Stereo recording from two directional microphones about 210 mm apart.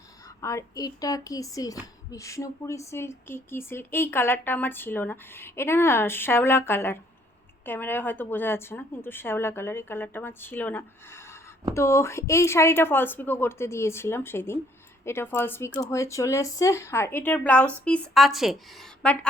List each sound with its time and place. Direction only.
0.4 s speech: 15° left (ahead or behind); by 18.6 s centre (ahead or behind)